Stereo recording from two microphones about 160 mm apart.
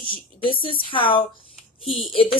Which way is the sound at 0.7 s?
35° left (ahead or behind).